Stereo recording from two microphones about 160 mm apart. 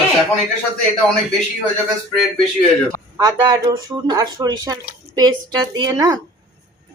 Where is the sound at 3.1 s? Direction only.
25° right (ahead or behind).